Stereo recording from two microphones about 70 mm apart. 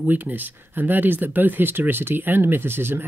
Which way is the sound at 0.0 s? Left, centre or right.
Right.